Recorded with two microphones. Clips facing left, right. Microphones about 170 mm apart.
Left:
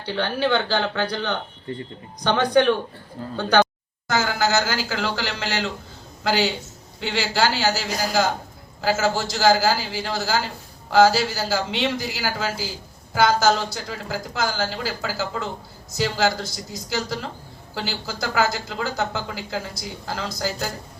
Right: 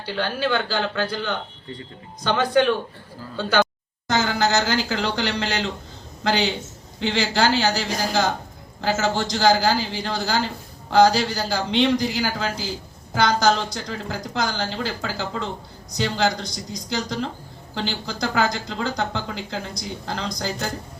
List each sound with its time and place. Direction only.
0.0 s a man's voice: 20° left (ahead or behind)
4.1 s a man's voice: 5° left (ahead or behind)